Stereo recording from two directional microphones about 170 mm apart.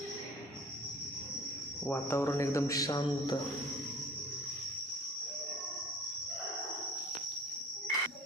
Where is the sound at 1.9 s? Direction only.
15° left (ahead or behind).